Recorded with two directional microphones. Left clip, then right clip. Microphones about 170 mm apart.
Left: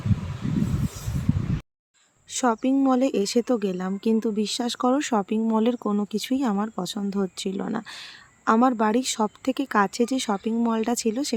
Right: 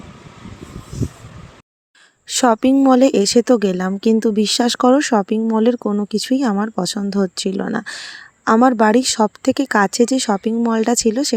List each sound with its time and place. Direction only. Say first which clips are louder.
2.3 s speech: right 9 dB; 50° right (ahead or behind); by 11.3 s 35° right (ahead or behind)